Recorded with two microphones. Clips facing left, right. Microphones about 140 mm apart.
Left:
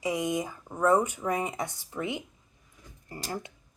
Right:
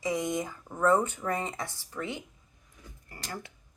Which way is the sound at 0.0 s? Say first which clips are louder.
Left 1 dB; 10° left (ahead or behind).